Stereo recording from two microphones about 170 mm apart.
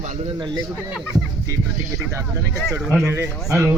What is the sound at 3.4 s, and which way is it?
Speech, 5° right (ahead or behind).